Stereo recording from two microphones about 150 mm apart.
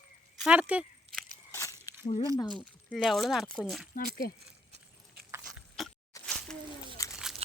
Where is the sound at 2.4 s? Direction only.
30° left (ahead or behind).